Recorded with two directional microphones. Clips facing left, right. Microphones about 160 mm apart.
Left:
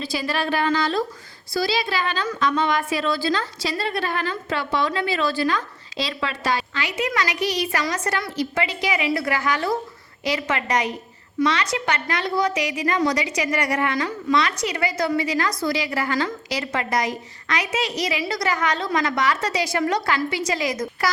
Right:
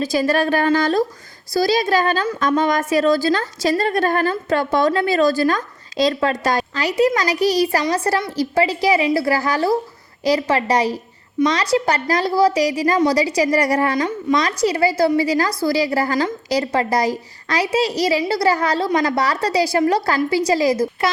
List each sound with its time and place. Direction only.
0.0 s a woman's voice: 45° right (ahead or behind)